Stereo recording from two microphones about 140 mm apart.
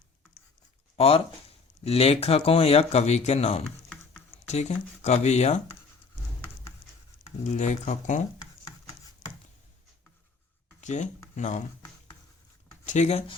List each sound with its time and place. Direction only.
0.9 s speech: 45° left (ahead or behind)
7.4 s speech: 55° left (ahead or behind)
10.8 s a sound: 55° left (ahead or behind)
11.3 s speech: 60° left (ahead or behind)
12.8 s speech: 55° left (ahead or behind)